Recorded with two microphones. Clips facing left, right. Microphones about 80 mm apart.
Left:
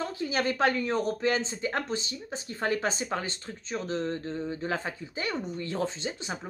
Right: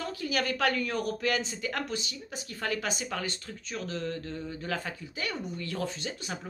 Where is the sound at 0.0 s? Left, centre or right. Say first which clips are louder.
Left 2 dB; left.